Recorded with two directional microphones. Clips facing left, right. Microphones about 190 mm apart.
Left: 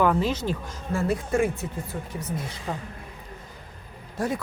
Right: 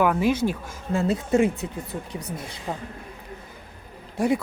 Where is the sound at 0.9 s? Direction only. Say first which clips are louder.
Right 3 dB; 25° right (ahead or behind).